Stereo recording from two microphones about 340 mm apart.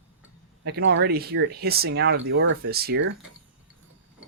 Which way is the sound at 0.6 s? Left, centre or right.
Right.